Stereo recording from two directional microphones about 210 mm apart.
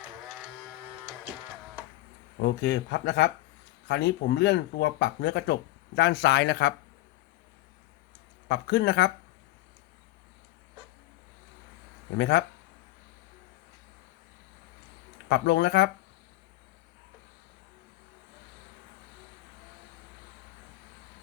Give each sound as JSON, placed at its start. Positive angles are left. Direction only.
{"t": 2.4, "sound": "speech", "side_deg": 55}
{"t": 8.4, "sound": "speech", "side_deg": 55}
{"t": 12.1, "sound": "speech", "side_deg": 55}
{"t": 15.3, "sound": "speech", "side_deg": 55}